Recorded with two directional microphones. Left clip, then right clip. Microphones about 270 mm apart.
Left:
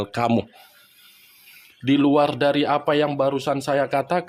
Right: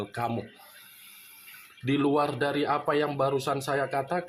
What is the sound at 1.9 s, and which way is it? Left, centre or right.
Speech, left.